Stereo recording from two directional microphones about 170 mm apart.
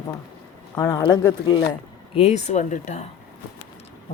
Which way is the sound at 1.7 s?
35° left (ahead or behind).